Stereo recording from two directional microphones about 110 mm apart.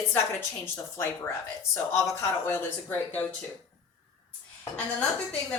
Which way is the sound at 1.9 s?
25° left (ahead or behind).